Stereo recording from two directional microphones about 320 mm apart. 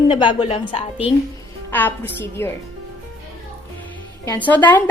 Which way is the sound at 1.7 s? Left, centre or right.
Centre.